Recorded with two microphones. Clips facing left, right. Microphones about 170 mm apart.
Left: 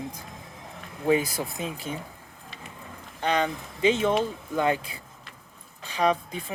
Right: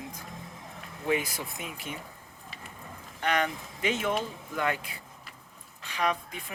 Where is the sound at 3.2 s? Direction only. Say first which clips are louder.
Left 3 dB; 25° left (ahead or behind).